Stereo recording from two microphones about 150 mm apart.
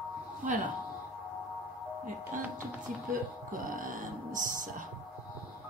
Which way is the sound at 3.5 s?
65° right (ahead or behind).